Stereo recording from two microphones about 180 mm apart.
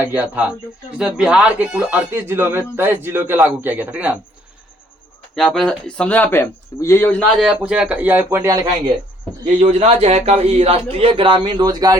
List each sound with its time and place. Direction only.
0.0 s speech: 10° right (ahead or behind)
5.3 s speech: centre (ahead or behind)
7.5 s speech: 5° right (ahead or behind)
9.6 s a man's voice: 35° right (ahead or behind)